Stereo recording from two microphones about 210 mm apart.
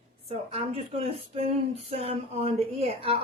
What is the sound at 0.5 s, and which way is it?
A woman's voice, 30° right (ahead or behind).